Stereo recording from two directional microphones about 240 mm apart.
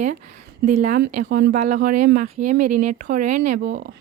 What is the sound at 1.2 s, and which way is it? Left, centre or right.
Speech, right.